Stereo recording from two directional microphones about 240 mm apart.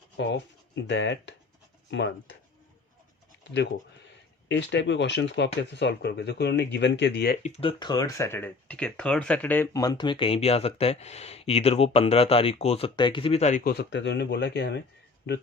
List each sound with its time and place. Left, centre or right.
0.2 s speech: left
4.4 s speech: left
7.4 s speech: left
13.7 s speech: left